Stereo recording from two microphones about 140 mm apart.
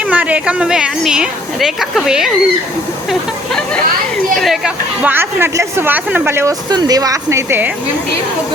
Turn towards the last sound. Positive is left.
turn(degrees=-20)  # may be behind; listen again after turning